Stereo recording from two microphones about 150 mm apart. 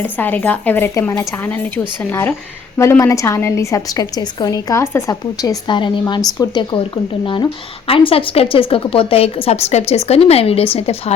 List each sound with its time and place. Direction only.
0.0 s a woman's voice: 10° left (ahead or behind); by 10.7 s 40° left (ahead or behind)